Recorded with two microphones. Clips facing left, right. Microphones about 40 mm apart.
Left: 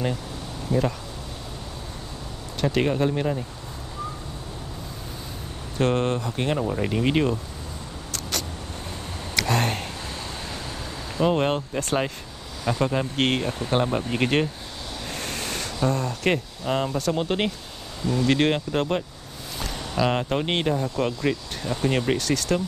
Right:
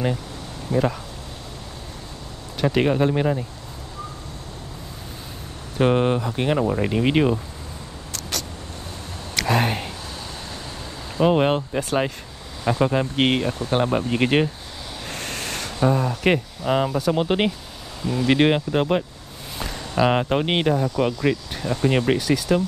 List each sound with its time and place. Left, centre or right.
0.7 s speech: centre
2.6 s speech: centre
5.8 s speech: centre
8.1 s vehicle: centre
9.3 s a sound: centre
11.1 s speech: centre